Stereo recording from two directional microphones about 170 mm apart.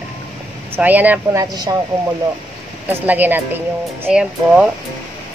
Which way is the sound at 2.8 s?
10° right (ahead or behind).